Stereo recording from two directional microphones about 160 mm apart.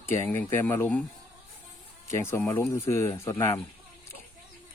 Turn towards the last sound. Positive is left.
turn(degrees=20)  # may be behind; listen again after turning